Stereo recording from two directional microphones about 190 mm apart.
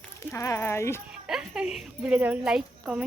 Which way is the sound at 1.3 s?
5° right (ahead or behind).